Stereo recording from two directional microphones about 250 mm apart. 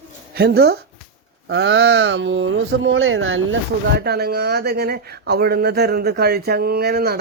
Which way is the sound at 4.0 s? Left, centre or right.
Right.